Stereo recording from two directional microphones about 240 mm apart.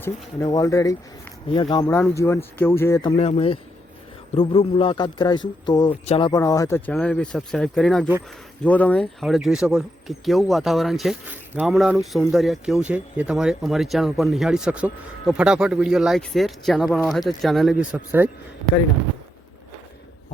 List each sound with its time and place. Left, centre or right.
0.0 s speech: centre
3.1 s a man's voice: left; by 18.3 s centre